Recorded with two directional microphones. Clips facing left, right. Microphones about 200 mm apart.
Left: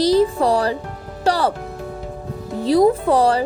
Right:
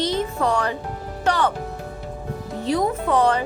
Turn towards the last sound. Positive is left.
turn(degrees=35)  # may be behind; listen again after turning